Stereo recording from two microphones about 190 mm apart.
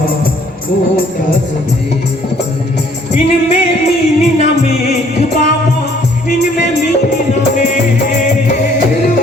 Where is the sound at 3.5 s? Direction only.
35° left (ahead or behind).